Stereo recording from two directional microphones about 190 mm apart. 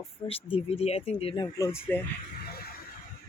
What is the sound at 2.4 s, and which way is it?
Music, 55° left (ahead or behind).